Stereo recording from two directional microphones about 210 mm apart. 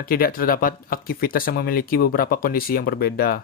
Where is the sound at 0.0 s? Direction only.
45° left (ahead or behind).